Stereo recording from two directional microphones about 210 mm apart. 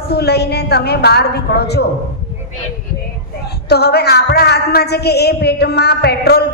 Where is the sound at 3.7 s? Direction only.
50° left (ahead or behind).